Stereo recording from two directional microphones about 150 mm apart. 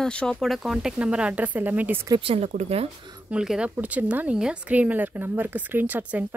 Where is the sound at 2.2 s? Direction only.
40° right (ahead or behind).